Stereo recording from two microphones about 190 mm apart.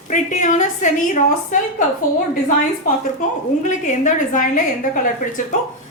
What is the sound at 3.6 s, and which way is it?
A woman's voice, 40° left (ahead or behind).